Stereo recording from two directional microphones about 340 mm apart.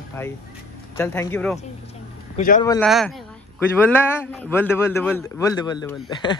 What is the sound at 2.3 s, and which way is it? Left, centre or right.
Speech, left.